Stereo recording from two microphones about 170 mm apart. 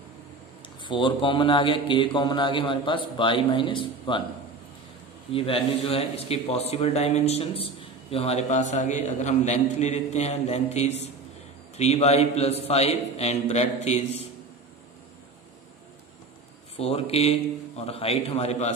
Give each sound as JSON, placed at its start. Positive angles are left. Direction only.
{"t": 0.6, "sound": "speech", "side_deg": 30}
{"t": 5.3, "sound": "a man's voice", "side_deg": 35}
{"t": 16.7, "sound": "a man's voice", "side_deg": 35}